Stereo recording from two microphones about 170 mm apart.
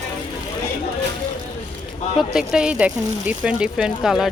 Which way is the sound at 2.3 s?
5° right (ahead or behind).